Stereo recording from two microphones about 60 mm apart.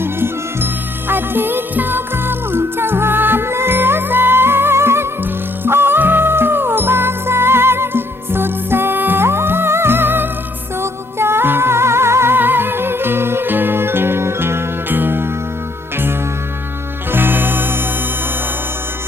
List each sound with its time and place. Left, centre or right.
0.0 s music: right
17.1 s music: right